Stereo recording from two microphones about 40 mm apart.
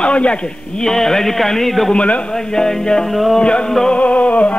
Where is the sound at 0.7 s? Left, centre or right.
Centre.